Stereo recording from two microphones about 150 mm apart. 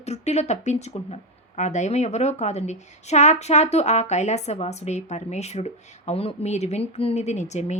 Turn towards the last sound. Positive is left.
turn(degrees=50)  # may be behind; listen again after turning